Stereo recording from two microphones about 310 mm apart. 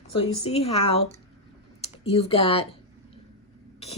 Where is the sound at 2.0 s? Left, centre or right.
Centre.